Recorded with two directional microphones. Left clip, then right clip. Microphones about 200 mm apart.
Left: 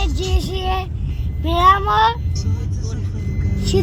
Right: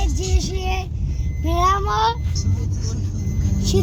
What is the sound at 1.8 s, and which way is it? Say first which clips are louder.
Child singing: left 5 dB; 20° left (ahead or behind).